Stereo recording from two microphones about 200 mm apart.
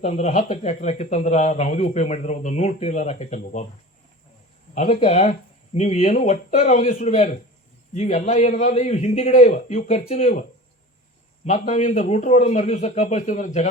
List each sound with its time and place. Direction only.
0.0 s speech: 35° left (ahead or behind)
4.7 s speech: 35° left (ahead or behind)
11.4 s speech: 35° left (ahead or behind)